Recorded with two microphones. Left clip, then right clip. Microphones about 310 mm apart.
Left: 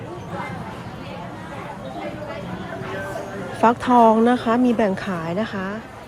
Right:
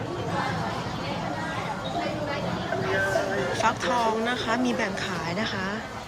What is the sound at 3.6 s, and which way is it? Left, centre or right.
A woman's voice, centre.